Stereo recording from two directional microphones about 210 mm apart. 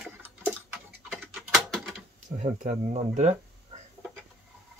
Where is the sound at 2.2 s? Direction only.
35° right (ahead or behind).